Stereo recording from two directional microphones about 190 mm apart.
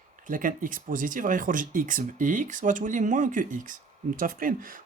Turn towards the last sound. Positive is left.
turn(degrees=-45)  # may be behind; listen again after turning